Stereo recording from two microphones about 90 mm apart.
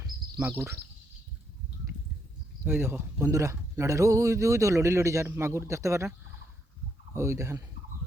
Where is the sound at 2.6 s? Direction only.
20° right (ahead or behind).